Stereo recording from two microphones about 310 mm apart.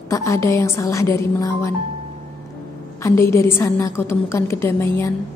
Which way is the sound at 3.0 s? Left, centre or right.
Centre.